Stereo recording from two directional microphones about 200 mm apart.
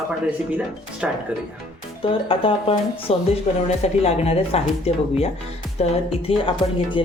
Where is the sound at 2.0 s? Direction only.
25° left (ahead or behind).